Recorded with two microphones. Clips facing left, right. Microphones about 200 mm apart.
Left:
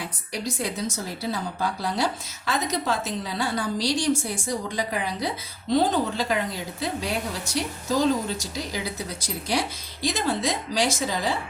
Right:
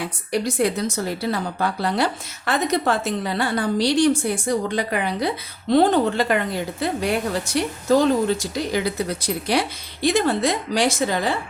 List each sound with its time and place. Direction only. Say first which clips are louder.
0.3 s a woman's voice: right 9 dB; 65° right (ahead or behind)